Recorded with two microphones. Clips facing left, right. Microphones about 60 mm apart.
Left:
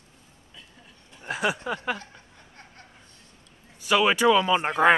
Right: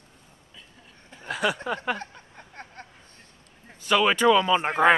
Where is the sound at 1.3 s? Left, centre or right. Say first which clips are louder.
Even; centre.